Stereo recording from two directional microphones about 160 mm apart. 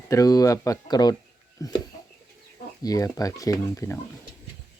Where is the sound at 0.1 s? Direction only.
20° left (ahead or behind).